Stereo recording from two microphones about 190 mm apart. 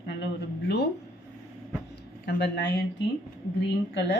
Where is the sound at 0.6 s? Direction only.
60° left (ahead or behind).